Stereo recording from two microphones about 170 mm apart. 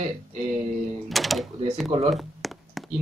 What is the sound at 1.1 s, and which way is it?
Speech, centre (ahead or behind).